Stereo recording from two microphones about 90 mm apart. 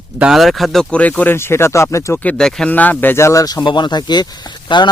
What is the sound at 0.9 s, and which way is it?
Speech, 15° left (ahead or behind).